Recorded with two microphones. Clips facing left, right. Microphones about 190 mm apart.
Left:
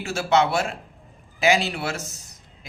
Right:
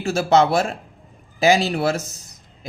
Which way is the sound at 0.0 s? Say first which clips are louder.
Right 4 dB; 40° right (ahead or behind).